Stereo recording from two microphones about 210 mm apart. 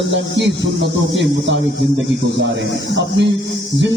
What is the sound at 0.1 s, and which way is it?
Speech, 55° right (ahead or behind).